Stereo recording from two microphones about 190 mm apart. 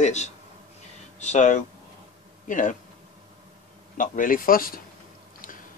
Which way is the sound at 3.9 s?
45° left (ahead or behind).